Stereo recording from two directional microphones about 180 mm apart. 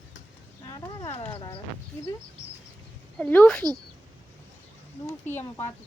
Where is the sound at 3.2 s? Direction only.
5° left (ahead or behind).